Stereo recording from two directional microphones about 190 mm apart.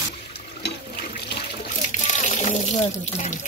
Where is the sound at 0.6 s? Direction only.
55° left (ahead or behind).